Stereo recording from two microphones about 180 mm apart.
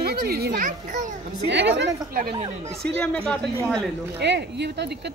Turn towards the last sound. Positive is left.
turn(degrees=-70)  # may be behind; listen again after turning